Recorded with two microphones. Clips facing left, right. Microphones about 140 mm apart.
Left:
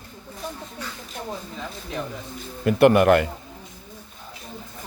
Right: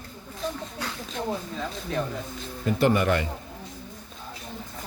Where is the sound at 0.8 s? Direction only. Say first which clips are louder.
Right 2 dB; 75° right (ahead or behind).